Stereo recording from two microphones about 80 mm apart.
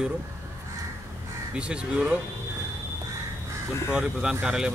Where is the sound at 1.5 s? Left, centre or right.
Centre.